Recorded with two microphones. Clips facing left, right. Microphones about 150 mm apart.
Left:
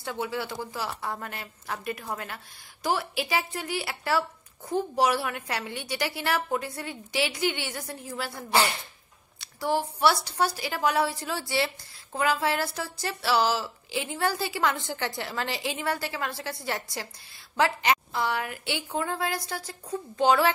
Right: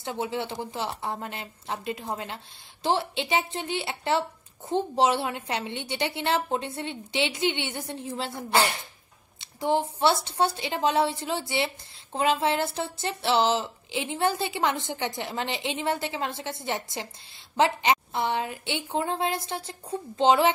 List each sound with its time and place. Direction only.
0.0 s a woman's voice: 20° right (ahead or behind)